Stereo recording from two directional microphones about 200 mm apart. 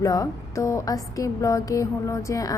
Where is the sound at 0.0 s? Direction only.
15° left (ahead or behind).